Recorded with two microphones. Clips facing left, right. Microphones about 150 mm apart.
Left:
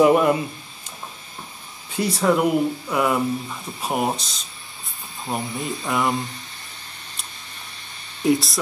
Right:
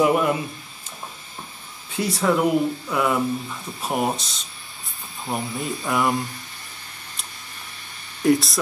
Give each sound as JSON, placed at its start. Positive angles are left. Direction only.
{"t": 0.0, "sound": "speech", "side_deg": 25}
{"t": 2.0, "sound": "speech", "side_deg": 0}
{"t": 8.3, "sound": "speech", "side_deg": 0}